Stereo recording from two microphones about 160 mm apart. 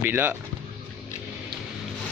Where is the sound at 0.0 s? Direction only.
15° right (ahead or behind).